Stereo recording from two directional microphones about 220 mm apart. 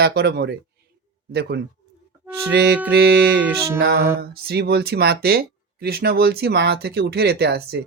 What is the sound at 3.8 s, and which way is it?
Speech, 45° right (ahead or behind).